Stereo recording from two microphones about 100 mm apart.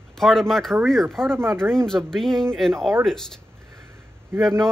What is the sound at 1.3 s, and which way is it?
Speech, 25° right (ahead or behind).